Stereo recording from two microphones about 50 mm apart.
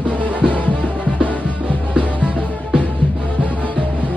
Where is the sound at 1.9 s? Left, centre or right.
Right.